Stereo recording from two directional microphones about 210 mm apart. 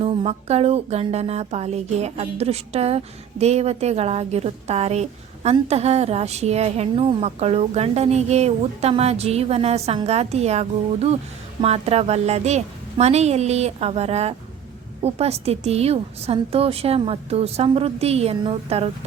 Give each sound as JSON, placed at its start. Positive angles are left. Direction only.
{"t": 0.0, "sound": "a woman's voice", "side_deg": -30}